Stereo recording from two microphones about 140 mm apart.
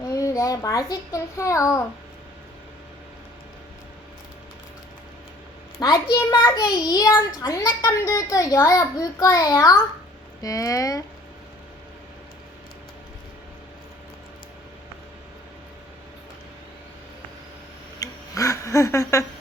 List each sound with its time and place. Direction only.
0.0 s a child's voice: 25° left (ahead or behind)
5.8 s a child's voice: 30° left (ahead or behind)
18.0 s a sound: 20° left (ahead or behind)